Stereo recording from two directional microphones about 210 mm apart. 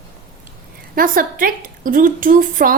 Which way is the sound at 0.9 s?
40° right (ahead or behind).